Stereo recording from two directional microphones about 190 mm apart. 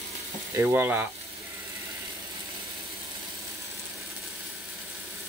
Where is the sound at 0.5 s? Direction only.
10° right (ahead or behind).